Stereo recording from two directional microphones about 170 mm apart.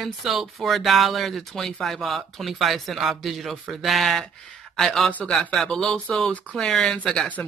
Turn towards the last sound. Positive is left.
turn(degrees=5)  # may be behind; listen again after turning